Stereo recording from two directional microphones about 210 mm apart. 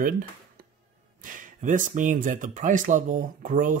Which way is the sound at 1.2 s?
40° right (ahead or behind).